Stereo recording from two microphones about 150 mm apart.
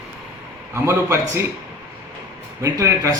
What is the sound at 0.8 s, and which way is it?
Speech, 15° right (ahead or behind).